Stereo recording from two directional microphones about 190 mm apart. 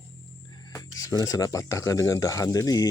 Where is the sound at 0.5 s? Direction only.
15° left (ahead or behind).